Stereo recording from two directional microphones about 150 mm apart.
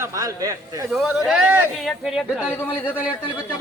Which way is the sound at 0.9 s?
5° right (ahead or behind).